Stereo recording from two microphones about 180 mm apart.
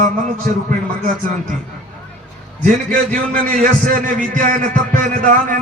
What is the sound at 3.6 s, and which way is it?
A man's voice, 45° right (ahead or behind).